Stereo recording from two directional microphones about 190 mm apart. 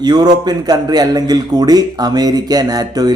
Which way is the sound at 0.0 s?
20° right (ahead or behind).